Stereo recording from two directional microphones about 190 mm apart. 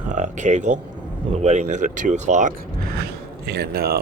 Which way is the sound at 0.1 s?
40° right (ahead or behind).